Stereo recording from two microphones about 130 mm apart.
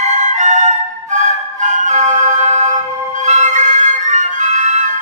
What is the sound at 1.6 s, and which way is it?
Siren, 65° right (ahead or behind).